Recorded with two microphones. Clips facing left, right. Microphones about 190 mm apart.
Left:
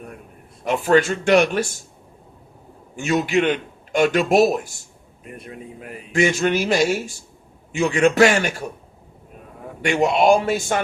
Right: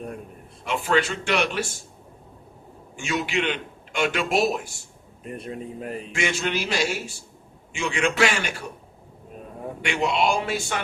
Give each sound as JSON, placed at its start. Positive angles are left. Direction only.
{"t": 0.6, "sound": "a man's voice", "side_deg": 45}
{"t": 2.9, "sound": "a man's voice", "side_deg": 45}
{"t": 5.5, "sound": "speech", "side_deg": -35}
{"t": 6.1, "sound": "a man's voice", "side_deg": 45}
{"t": 9.8, "sound": "a man's voice", "side_deg": 45}